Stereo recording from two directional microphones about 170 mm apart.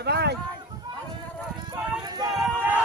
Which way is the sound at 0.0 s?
75° right (ahead or behind).